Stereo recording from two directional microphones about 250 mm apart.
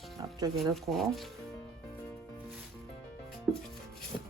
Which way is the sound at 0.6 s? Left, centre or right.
Centre.